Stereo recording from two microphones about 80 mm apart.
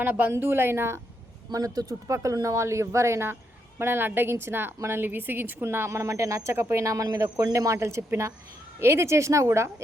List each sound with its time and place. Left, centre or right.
0.0 s a woman's voice: right
1.5 s a woman's voice: right